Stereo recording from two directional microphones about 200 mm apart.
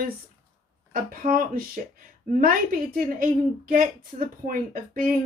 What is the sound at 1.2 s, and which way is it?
A woman's voice, 45° right (ahead or behind).